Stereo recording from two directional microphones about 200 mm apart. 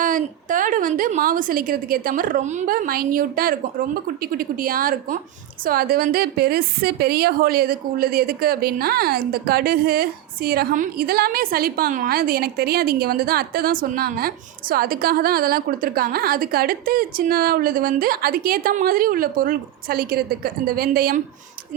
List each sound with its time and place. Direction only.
0.0 s a woman's voice: 40° right (ahead or behind)